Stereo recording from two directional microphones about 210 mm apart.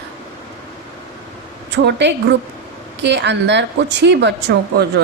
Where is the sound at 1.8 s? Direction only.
55° right (ahead or behind).